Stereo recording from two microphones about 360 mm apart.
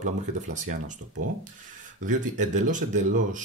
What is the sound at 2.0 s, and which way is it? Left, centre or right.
Speech, right.